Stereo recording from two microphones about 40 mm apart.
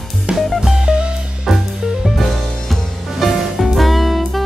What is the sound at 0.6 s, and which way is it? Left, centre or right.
Music, centre.